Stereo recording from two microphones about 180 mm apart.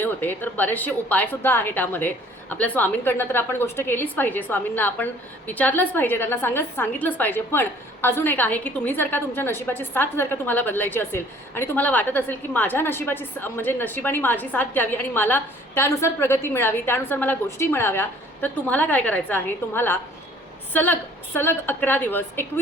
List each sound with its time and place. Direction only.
0.0 s a woman's voice: 10° left (ahead or behind)